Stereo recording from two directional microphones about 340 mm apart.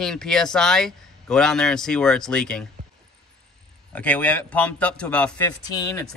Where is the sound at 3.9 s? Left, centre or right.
Centre.